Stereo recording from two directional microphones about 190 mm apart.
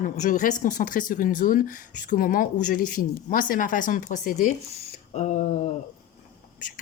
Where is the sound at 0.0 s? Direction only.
40° left (ahead or behind).